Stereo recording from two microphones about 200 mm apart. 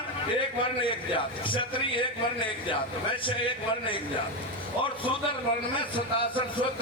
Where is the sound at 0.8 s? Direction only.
25° left (ahead or behind).